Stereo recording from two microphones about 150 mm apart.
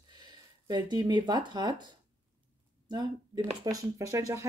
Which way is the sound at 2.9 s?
25° right (ahead or behind).